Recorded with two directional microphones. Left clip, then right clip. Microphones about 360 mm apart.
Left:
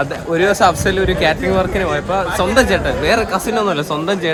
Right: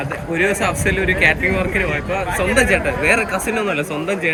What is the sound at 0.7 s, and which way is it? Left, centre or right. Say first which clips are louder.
Speech: left 2 dB; centre.